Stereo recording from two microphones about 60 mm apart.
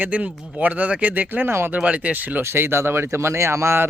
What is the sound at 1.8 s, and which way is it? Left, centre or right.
Speech, right.